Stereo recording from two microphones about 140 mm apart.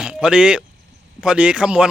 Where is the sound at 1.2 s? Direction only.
5° right (ahead or behind).